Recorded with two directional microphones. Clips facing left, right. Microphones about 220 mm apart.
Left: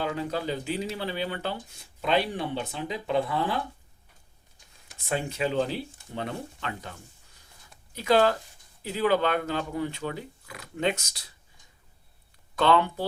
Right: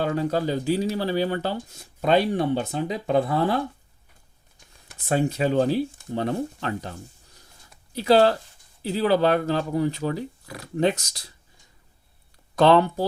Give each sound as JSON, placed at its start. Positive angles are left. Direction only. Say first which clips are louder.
{"t": 0.0, "sound": "speech", "louder": "right 6 dB", "side_deg": -40}
{"t": 5.0, "sound": "speech", "louder": "right 6 dB", "side_deg": -40}
{"t": 7.9, "sound": "speech", "louder": "right 4 dB", "side_deg": -35}
{"t": 12.5, "sound": "speech", "louder": "right 6 dB", "side_deg": -40}